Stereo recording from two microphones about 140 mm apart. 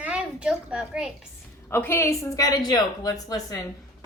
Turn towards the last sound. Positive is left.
turn(degrees=25)  # may be behind; listen again after turning